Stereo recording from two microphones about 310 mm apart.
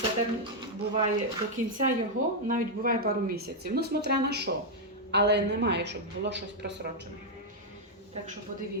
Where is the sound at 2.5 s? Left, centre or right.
Right.